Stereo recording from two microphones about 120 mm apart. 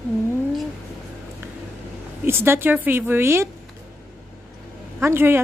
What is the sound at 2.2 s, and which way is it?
Speech, 20° right (ahead or behind).